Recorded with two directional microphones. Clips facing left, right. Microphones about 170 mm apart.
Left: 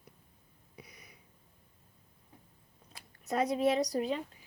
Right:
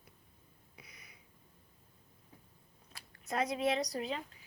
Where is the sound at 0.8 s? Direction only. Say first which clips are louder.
Left 6 dB; 40° left (ahead or behind).